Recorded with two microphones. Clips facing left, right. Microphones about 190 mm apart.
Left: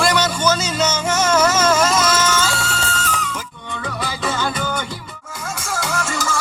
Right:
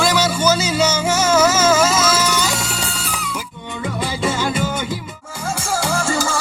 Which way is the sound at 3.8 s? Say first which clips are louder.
Right 4 dB; 25° right (ahead or behind).